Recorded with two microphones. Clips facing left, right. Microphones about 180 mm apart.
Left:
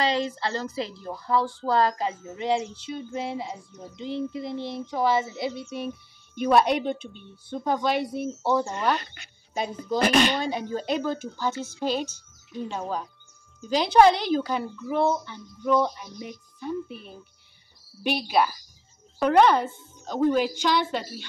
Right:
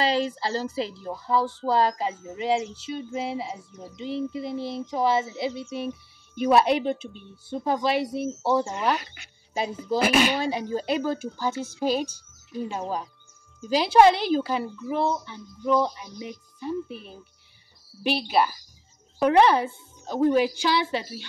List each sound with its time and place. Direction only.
0.1 s a woman's voice: 30° right (ahead or behind)
0.6 s speech: 5° right (ahead or behind)